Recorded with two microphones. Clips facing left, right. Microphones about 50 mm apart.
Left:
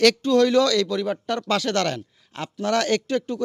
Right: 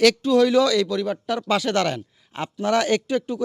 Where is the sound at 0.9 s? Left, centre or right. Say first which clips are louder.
Even; centre.